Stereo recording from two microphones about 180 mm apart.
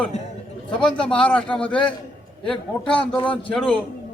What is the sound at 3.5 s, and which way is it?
Speech, 5° left (ahead or behind).